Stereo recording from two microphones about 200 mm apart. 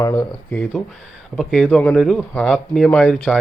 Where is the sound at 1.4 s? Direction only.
Centre (ahead or behind).